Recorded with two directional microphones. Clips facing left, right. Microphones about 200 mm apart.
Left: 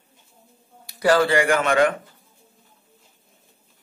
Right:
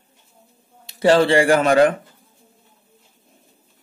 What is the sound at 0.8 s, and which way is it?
A man's voice, 25° right (ahead or behind).